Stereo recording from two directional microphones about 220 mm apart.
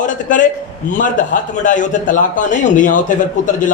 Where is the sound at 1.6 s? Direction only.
35° left (ahead or behind).